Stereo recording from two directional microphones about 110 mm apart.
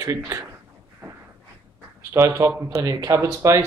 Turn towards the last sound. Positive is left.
turn(degrees=-25)  # may be behind; listen again after turning